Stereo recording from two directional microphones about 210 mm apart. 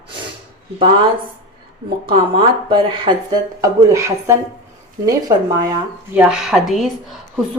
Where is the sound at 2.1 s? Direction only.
25° right (ahead or behind).